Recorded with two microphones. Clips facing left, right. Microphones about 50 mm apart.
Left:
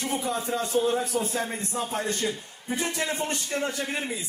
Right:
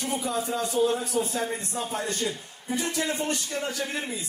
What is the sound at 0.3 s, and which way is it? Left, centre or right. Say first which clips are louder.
A man's voice: even; left.